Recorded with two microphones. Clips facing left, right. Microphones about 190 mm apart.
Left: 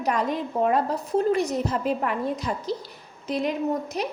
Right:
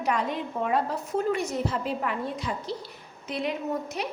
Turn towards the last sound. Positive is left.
turn(degrees=40)  # may be behind; listen again after turning